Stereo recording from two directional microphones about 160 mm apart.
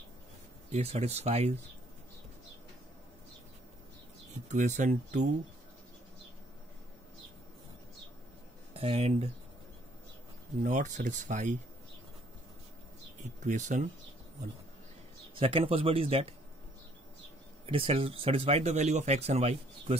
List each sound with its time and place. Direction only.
0.7 s speech: 45° right (ahead or behind)
4.5 s speech: 50° right (ahead or behind)
8.7 s speech: 40° right (ahead or behind)
10.6 s speech: 50° right (ahead or behind)
13.4 s speech: 50° right (ahead or behind)
15.3 s speech: 35° right (ahead or behind)
17.6 s speech: 35° right (ahead or behind)